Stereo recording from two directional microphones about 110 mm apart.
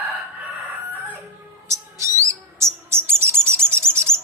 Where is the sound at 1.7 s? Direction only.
25° right (ahead or behind).